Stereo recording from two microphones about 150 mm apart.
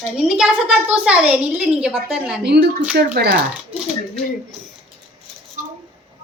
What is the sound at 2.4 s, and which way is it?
Speech, 90° right.